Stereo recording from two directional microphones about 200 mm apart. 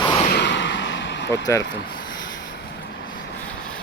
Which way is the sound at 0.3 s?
60° left (ahead or behind).